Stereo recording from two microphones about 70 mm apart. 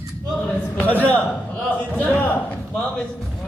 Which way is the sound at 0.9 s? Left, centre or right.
Left.